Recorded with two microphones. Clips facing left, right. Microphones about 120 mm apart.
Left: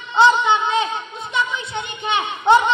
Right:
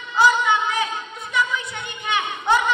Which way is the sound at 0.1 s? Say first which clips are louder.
Left 3 dB; 25° left (ahead or behind).